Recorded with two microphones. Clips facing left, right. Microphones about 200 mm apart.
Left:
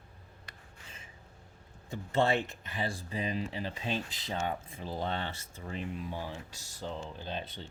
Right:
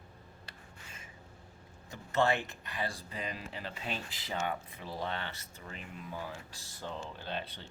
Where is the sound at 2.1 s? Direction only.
25° left (ahead or behind).